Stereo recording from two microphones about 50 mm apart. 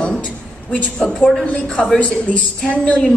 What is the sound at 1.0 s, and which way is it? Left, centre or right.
A woman's voice, centre.